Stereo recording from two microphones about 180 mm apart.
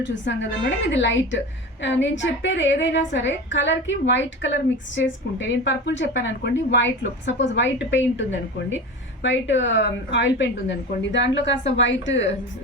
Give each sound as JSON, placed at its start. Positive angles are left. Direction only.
{"t": 0.0, "sound": "a woman's voice", "side_deg": 90}